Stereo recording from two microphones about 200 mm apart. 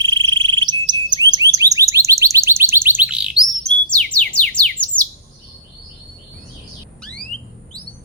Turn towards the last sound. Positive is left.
turn(degrees=5)  # may be behind; listen again after turning